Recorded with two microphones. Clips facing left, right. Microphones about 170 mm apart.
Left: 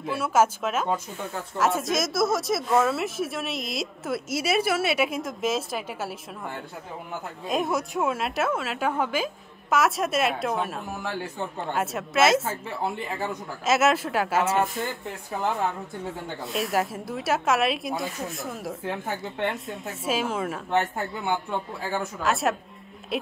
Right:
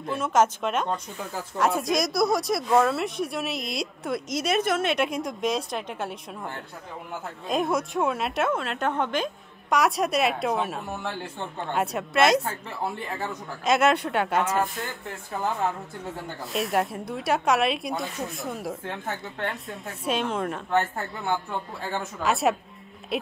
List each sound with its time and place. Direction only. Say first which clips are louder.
0.0 s a woman's voice: even; 5° left (ahead or behind)
19.0 s speech: left 2 dB; 15° left (ahead or behind)
19.4 s a woman's voice: left 3 dB; centre (ahead or behind)